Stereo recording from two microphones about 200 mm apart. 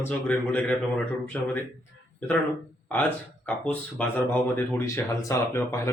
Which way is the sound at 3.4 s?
5° left (ahead or behind).